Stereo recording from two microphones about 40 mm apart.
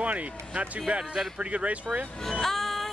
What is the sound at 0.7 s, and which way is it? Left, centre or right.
A man's voice, right.